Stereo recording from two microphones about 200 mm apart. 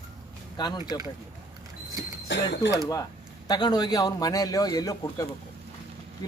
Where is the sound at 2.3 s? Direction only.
60° left (ahead or behind).